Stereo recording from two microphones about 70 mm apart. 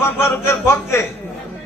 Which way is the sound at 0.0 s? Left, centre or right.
Left.